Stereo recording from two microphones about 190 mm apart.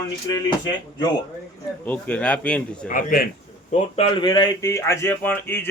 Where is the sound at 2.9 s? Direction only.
45° left (ahead or behind).